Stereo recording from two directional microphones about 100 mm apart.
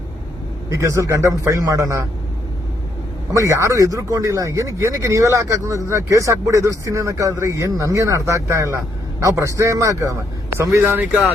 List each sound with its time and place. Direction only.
0.7 s speech: 30° right (ahead or behind)
3.3 s speech: 30° right (ahead or behind)
10.6 s speech: 25° right (ahead or behind)